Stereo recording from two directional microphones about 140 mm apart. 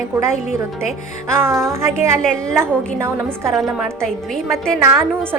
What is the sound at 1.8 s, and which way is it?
Speech, 20° right (ahead or behind).